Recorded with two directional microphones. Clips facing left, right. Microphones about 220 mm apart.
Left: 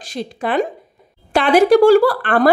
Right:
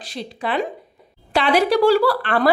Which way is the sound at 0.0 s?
45° left (ahead or behind).